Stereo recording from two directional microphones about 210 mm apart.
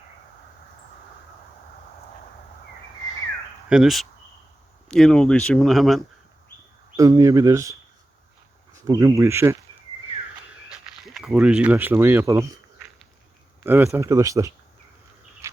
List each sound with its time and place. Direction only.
3.7 s speech: centre (ahead or behind)
6.9 s speech: 15° right (ahead or behind)
10.7 s speech: centre (ahead or behind)
13.7 s speech: 10° right (ahead or behind)